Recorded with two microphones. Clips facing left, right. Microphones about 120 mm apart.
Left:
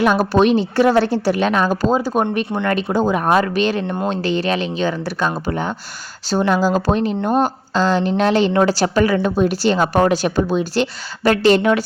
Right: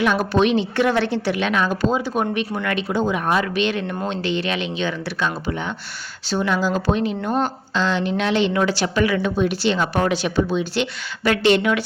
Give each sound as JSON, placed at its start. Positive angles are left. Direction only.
{"t": 0.0, "sound": "a woman's voice", "side_deg": 40}